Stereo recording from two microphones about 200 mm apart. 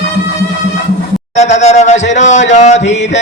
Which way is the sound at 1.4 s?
35° left (ahead or behind).